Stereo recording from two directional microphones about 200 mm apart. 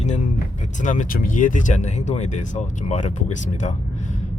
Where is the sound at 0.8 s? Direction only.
40° left (ahead or behind).